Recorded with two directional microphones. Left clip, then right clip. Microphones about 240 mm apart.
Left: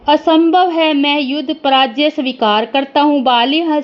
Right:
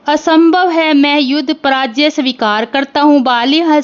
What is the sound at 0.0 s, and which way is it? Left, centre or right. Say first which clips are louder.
Speech: right 1 dB; right.